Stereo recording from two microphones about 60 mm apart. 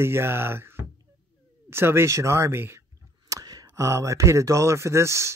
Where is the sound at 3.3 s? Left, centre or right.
Right.